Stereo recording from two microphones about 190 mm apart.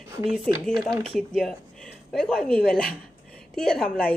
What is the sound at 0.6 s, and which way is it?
Speech, centre (ahead or behind).